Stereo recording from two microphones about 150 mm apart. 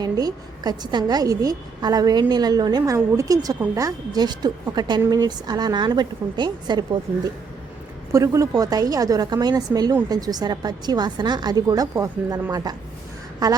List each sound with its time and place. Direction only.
0.0 s a woman's voice: 25° right (ahead or behind)
8.1 s a woman's voice: 20° right (ahead or behind)